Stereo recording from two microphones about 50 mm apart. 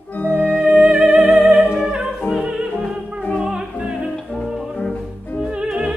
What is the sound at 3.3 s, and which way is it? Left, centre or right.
Music, centre.